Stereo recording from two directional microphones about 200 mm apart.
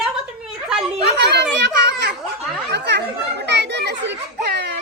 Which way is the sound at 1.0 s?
55° right (ahead or behind).